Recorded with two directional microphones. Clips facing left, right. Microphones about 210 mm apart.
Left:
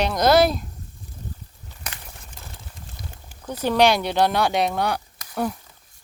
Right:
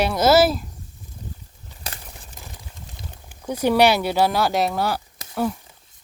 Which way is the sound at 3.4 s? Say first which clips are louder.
Right 2 dB; 10° right (ahead or behind).